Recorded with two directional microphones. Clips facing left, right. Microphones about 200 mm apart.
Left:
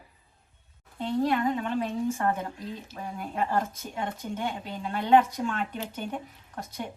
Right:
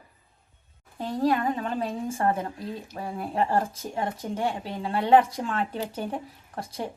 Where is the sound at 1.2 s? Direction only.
35° right (ahead or behind).